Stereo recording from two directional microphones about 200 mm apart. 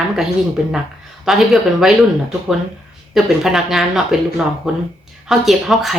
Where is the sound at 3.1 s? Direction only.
Centre (ahead or behind).